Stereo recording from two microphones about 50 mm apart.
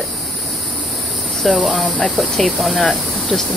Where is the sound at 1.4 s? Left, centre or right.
Centre.